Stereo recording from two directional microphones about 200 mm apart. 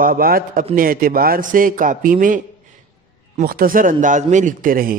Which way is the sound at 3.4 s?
50° right (ahead or behind).